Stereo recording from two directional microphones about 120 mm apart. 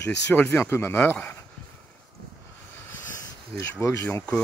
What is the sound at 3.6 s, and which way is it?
Speech, 25° left (ahead or behind).